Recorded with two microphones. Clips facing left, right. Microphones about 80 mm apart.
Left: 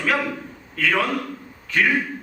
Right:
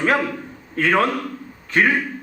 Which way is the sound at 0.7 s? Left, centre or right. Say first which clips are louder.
Right 3 dB; right.